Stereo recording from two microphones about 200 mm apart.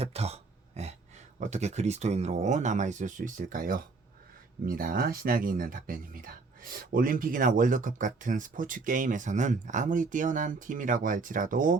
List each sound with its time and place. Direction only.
0.0 s throat clearing: 30° right (ahead or behind)
1.4 s speech: 35° right (ahead or behind)